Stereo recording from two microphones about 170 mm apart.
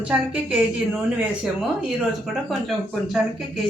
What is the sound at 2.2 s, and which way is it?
Speech, centre (ahead or behind).